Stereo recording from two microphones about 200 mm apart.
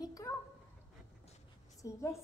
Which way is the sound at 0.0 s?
15° left (ahead or behind).